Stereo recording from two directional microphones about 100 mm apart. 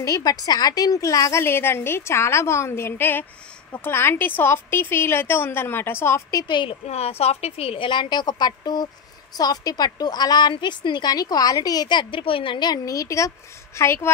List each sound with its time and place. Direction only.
0.0 s a woman's voice: 35° left (ahead or behind)
6.4 s a woman's voice: 55° left (ahead or behind); by 14.1 s 25° left (ahead or behind)